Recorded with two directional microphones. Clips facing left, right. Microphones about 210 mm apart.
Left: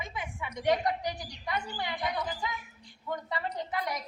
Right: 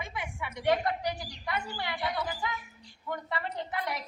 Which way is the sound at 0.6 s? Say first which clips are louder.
Even; 20° left (ahead or behind).